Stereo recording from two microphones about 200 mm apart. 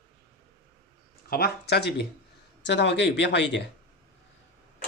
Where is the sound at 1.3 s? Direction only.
50° left (ahead or behind).